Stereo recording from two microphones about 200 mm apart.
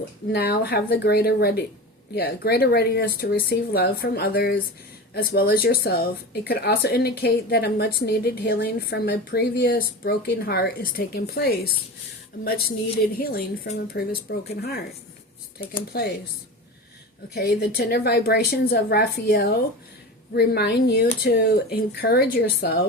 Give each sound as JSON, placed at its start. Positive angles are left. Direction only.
{"t": 0.3, "sound": "a woman's voice", "side_deg": 50}
{"t": 17.3, "sound": "a woman's voice", "side_deg": 50}